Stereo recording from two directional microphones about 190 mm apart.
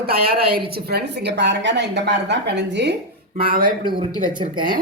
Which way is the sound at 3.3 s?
50° right (ahead or behind).